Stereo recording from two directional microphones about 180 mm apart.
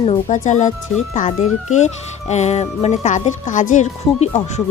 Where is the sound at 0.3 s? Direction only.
45° left (ahead or behind).